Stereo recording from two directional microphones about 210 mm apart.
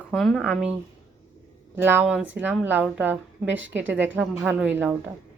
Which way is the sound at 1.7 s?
10° right (ahead or behind).